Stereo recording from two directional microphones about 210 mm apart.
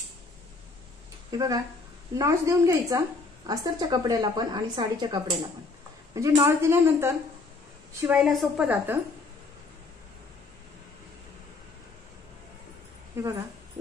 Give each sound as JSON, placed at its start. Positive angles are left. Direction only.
{"t": 1.3, "sound": "a woman's voice", "side_deg": -15}
{"t": 13.1, "sound": "a woman's voice", "side_deg": -15}